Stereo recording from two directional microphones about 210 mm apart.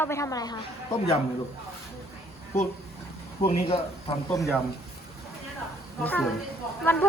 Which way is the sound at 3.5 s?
30° left (ahead or behind).